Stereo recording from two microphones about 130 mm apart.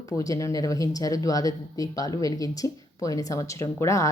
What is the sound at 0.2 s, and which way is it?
Speech, 25° left (ahead or behind).